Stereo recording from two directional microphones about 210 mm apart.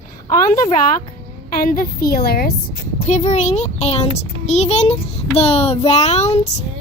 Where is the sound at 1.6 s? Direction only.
45° left (ahead or behind).